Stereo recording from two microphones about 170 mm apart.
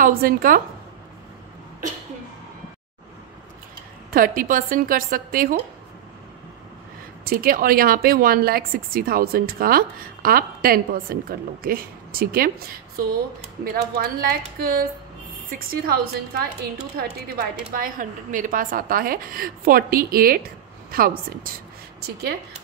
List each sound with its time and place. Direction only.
0.0 s a woman's voice: 55° right (ahead or behind)
4.1 s a woman's voice: 55° right (ahead or behind)
7.2 s a woman's voice: 60° right (ahead or behind)